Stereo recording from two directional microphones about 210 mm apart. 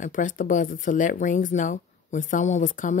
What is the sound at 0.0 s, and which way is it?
Speech, 35° left (ahead or behind).